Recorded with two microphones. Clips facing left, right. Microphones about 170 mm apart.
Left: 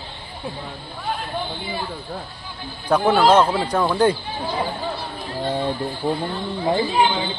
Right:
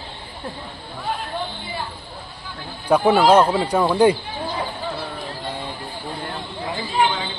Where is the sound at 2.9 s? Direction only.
10° right (ahead or behind).